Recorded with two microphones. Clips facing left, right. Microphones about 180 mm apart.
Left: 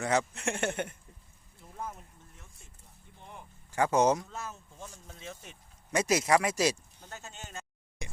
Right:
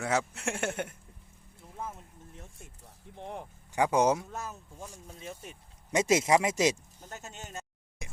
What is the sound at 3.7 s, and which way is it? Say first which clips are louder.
Speech: even; 15° right (ahead or behind).